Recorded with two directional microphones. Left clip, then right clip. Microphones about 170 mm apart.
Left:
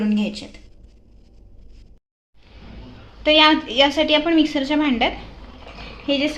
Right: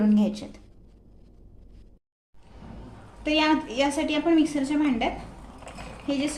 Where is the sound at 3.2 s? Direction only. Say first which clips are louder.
Left 9 dB; 30° left (ahead or behind).